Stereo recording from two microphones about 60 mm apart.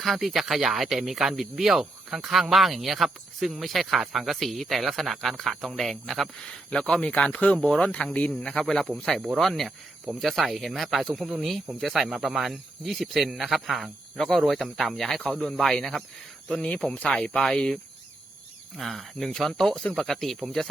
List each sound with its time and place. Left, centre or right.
0.0 s speech: centre
6.7 s speech: centre
7.6 s speech: centre
8.6 s speech: centre
16.6 s speech: centre
18.8 s speech: centre